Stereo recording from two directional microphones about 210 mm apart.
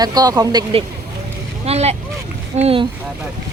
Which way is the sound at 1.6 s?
30° right (ahead or behind).